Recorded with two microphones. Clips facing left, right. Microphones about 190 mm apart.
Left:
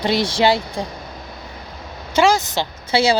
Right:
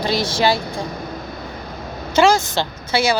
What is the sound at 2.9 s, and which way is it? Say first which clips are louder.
Speech: left 2 dB; 30° left (ahead or behind).